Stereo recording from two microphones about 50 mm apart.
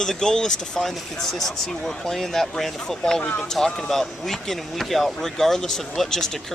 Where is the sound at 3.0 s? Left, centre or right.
Centre.